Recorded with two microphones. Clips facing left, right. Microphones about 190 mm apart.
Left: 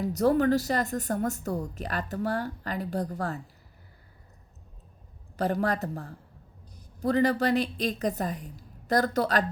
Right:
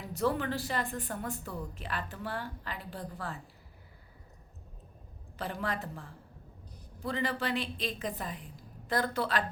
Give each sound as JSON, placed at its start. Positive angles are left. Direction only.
{"t": 0.0, "sound": "a woman's voice", "side_deg": 40}
{"t": 5.4, "sound": "a woman's voice", "side_deg": 40}